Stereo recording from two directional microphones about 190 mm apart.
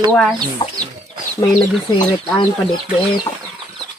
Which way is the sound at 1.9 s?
20° left (ahead or behind).